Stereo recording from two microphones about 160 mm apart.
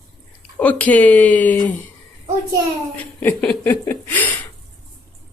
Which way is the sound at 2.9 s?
10° left (ahead or behind).